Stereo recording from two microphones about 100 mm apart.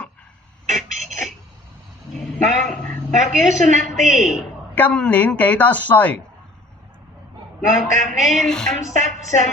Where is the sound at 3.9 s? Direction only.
5° right (ahead or behind).